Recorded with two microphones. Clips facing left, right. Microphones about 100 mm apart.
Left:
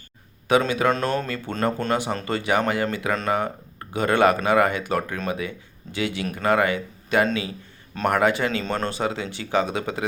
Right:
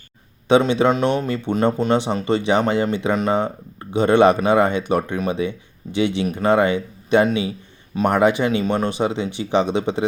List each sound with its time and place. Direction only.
0.4 s speech: 25° right (ahead or behind)